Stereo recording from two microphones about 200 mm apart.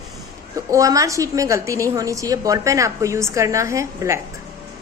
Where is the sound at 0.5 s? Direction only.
15° right (ahead or behind).